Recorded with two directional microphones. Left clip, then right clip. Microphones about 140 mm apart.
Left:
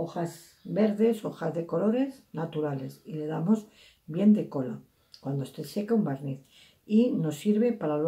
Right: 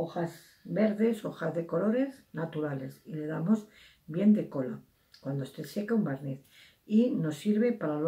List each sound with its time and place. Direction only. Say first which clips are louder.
0.7 s speech: left 3 dB; 25° left (ahead or behind)